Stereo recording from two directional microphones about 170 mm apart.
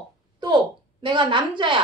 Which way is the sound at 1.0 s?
30° right (ahead or behind).